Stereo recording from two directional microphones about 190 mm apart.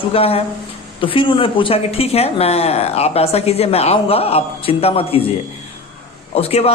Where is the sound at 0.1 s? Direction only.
30° left (ahead or behind).